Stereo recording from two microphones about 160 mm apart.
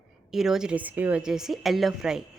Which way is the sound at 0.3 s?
Centre (ahead or behind).